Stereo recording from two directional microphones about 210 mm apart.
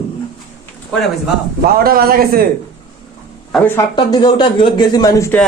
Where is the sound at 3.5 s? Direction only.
5° left (ahead or behind).